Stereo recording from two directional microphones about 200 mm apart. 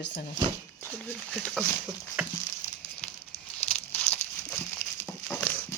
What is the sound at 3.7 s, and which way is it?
Crumpling, 10° left (ahead or behind).